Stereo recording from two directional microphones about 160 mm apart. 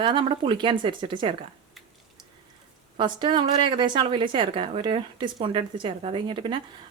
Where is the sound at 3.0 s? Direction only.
30° right (ahead or behind).